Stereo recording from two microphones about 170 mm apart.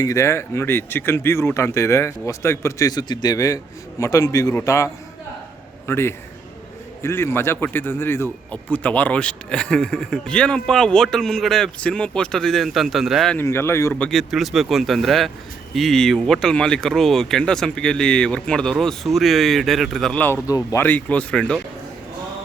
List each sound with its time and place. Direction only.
0.0 s speech: 20° left (ahead or behind)
5.9 s speech: 15° left (ahead or behind)
13.4 s speech: 15° left (ahead or behind)